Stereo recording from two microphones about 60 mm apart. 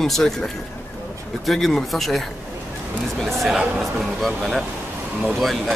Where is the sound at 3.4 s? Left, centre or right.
Centre.